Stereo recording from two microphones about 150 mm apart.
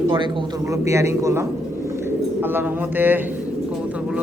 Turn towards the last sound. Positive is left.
turn(degrees=-15)  # may be behind; listen again after turning